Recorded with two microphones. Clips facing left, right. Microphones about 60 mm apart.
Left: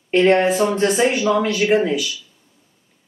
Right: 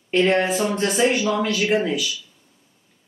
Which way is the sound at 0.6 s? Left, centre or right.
Centre.